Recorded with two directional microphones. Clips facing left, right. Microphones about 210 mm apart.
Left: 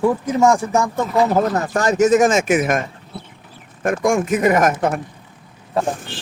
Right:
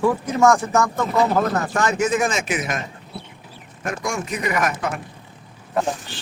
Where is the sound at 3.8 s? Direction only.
50° left (ahead or behind).